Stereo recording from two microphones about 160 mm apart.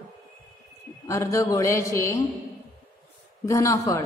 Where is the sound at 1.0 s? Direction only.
20° left (ahead or behind).